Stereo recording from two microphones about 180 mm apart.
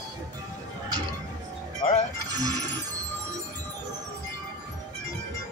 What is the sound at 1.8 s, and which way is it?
Music, 45° left (ahead or behind).